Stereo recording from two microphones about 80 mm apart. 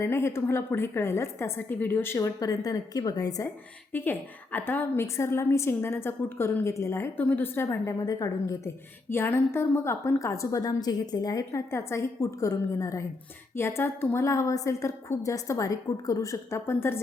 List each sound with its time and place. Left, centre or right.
0.0 s a woman's voice: left
2.1 s a woman's voice: left
3.9 s a woman's voice: left
7.2 s a woman's voice: left
7.9 s a woman's voice: left
9.0 s a woman's voice: left
11.7 s a woman's voice: left